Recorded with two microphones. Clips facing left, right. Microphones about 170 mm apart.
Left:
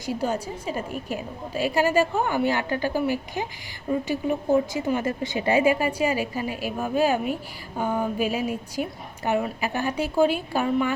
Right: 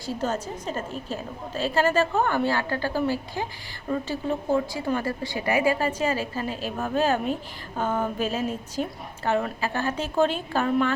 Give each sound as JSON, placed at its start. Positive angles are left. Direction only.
{"t": 0.0, "sound": "a woman's voice", "side_deg": 15}
{"t": 5.7, "sound": "a woman's voice", "side_deg": 15}